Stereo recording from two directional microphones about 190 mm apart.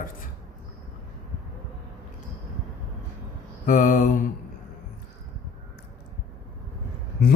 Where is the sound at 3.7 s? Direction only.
45° left (ahead or behind).